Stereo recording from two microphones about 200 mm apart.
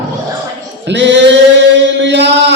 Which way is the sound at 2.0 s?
60° right (ahead or behind).